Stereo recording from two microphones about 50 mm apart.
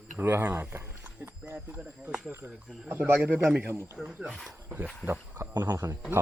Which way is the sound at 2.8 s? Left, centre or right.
Right.